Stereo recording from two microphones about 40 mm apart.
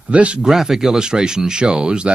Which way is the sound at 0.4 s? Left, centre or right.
Centre.